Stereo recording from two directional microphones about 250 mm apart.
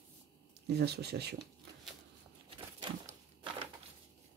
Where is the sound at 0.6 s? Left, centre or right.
Right.